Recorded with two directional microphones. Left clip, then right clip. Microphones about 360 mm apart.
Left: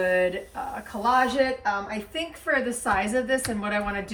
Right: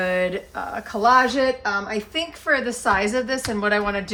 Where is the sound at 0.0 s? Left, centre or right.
Centre.